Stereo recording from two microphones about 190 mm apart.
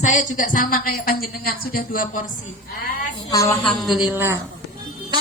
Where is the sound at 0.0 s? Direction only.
40° left (ahead or behind).